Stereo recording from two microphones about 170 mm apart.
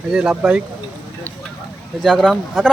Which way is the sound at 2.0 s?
5° left (ahead or behind).